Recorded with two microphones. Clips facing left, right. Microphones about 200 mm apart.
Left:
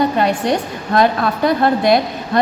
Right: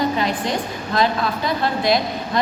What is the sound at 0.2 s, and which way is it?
A woman's voice, 60° left (ahead or behind).